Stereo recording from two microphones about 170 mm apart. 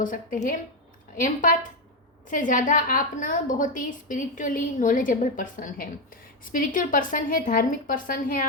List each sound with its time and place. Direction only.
0.0 s a woman's voice: 50° left (ahead or behind)